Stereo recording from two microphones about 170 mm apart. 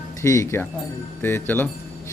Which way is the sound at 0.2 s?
15° left (ahead or behind).